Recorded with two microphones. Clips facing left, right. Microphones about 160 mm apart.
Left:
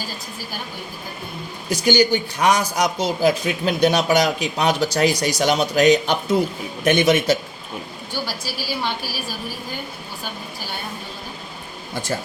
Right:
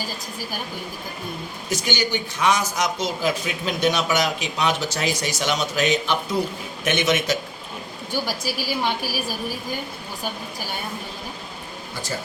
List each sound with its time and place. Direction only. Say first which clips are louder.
1.7 s speech: left 7 dB; 35° left (ahead or behind)
8.1 s a woman's voice: right 3 dB; 15° right (ahead or behind)